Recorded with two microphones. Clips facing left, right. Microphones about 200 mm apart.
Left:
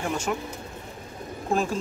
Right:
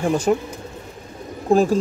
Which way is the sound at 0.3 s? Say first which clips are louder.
Right 12 dB; 40° right (ahead or behind).